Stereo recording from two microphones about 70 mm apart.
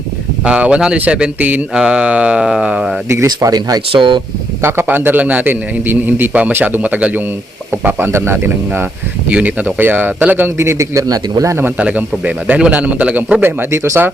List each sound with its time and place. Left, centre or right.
0.4 s mantra: centre
3.2 s speech: right
4.6 s a man's voice: right
9.3 s a man's voice: right
11.8 s a man's voice: centre
13.7 s speech: right